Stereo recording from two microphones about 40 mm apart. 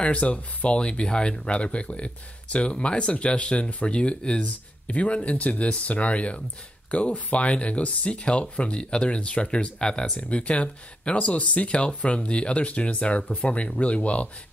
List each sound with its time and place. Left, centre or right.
0.0 s speech: left
10.1 s speech: left